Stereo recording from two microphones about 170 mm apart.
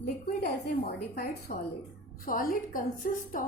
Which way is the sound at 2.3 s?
55° left (ahead or behind).